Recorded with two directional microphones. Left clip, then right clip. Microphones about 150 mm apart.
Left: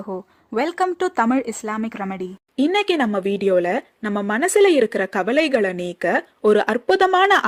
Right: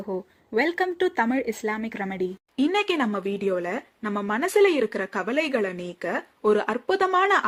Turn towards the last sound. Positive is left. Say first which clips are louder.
# left 6 dB
turn(degrees=40)  # may be behind; listen again after turning